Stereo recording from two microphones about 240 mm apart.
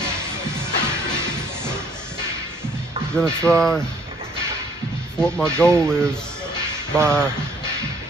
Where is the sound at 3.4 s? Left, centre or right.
Centre.